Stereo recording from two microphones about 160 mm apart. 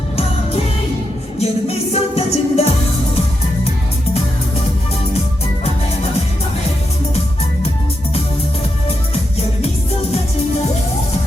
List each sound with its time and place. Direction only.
1.4 s music: 40° left (ahead or behind)